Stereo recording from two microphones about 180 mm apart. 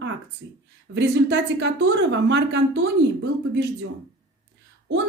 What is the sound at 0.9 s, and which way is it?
Speech, 80° right.